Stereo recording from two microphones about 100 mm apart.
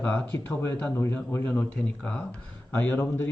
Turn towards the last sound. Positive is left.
turn(degrees=20)  # may be behind; listen again after turning